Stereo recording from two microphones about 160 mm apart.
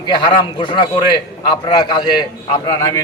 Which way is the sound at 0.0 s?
30° left (ahead or behind).